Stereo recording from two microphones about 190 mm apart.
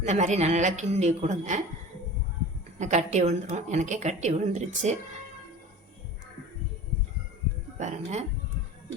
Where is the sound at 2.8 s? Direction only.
40° right (ahead or behind).